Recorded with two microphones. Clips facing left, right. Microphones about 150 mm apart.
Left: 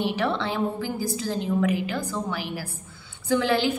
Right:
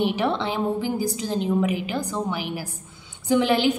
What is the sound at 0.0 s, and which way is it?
A woman's voice, 15° right (ahead or behind).